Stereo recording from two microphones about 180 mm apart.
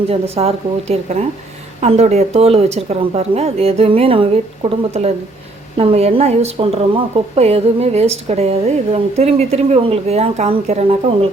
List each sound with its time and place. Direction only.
0.1 s speech: 35° right (ahead or behind)